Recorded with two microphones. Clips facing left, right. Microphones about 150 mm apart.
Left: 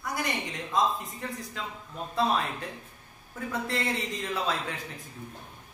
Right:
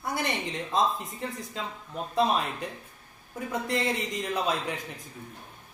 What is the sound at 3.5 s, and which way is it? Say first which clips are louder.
Speech: right 2 dB; 15° right (ahead or behind).